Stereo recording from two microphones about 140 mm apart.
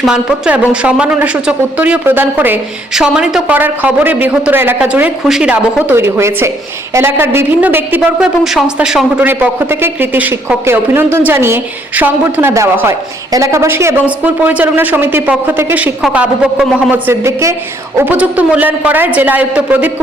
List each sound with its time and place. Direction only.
0.0 s speech: 5° right (ahead or behind)
8.4 s speech: 5° right (ahead or behind)
16.9 s a woman's voice: 20° right (ahead or behind)